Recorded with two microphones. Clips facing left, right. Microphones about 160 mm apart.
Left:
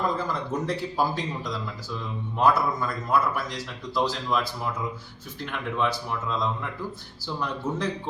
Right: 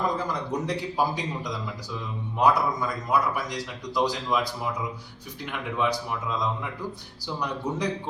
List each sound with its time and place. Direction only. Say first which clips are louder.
0.2 s speech: even; 15° right (ahead or behind)